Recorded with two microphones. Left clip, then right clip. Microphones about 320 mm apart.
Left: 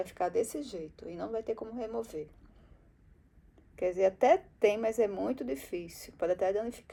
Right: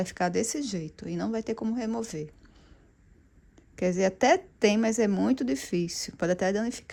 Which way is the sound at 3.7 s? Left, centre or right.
Right.